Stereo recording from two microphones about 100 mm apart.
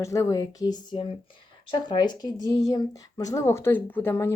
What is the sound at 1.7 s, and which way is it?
A woman's voice, 45° left (ahead or behind).